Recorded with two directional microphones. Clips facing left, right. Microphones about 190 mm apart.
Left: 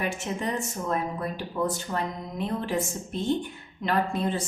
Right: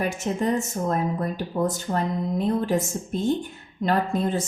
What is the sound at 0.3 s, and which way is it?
A woman's voice, 40° right (ahead or behind).